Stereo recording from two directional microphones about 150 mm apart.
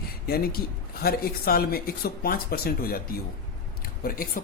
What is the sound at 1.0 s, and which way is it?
Speech, 85° left.